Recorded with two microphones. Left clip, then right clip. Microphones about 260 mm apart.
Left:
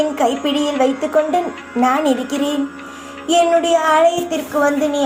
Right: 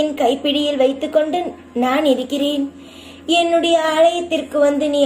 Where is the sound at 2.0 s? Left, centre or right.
Left.